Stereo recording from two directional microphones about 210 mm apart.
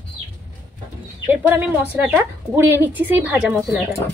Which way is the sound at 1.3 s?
10° right (ahead or behind).